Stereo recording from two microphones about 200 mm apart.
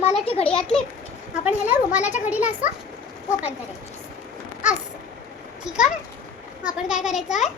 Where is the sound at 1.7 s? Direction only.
5° right (ahead or behind).